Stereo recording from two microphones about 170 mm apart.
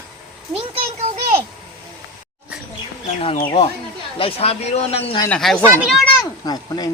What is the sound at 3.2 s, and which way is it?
A man's voice, 35° left (ahead or behind).